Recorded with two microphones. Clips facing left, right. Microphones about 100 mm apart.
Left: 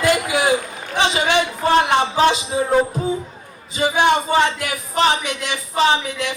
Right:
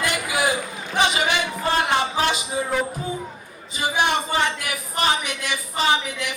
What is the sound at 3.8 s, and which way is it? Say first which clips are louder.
Speech: left 6 dB; 20° left (ahead or behind).